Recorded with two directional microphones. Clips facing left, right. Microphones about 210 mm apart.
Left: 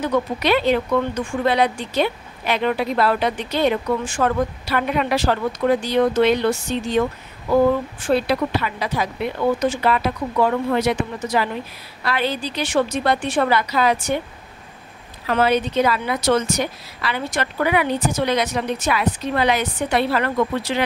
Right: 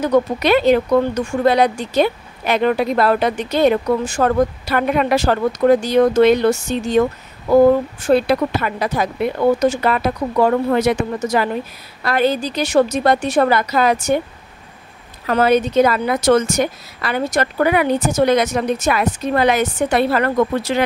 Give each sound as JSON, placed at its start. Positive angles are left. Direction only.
{"t": 0.0, "sound": "speech", "side_deg": -40}
{"t": 15.2, "sound": "speech", "side_deg": -45}